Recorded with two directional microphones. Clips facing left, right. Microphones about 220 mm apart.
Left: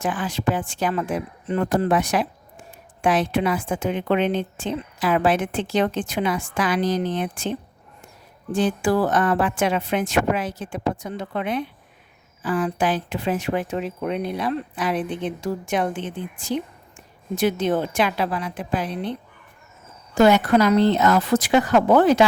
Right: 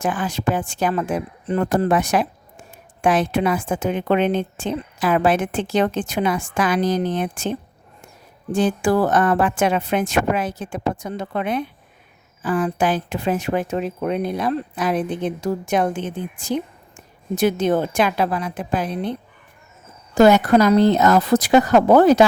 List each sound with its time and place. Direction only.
0.0 s a woman's voice: 45° right (ahead or behind)
8.5 s a woman's voice: 45° right (ahead or behind)
20.1 s a woman's voice: 40° right (ahead or behind)